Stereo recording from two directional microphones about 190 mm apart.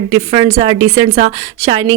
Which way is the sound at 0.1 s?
30° right (ahead or behind).